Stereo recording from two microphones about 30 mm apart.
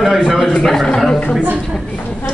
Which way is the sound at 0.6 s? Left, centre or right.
Centre.